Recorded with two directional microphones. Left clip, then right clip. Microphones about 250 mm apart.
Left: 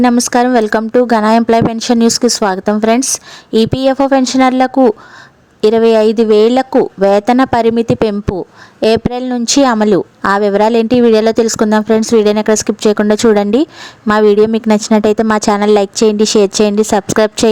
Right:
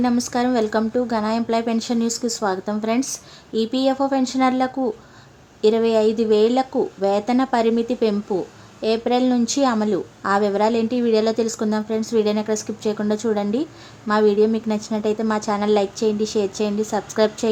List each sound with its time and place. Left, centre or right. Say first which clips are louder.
0.0 s speech: left 11 dB; left